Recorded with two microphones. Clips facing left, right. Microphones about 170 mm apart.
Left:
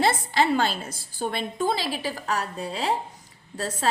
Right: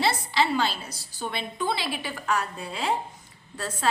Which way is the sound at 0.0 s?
50° left (ahead or behind).